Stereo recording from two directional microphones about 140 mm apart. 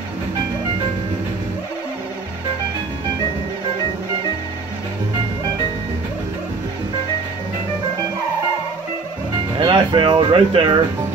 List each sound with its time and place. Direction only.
9.6 s speech: 35° right (ahead or behind)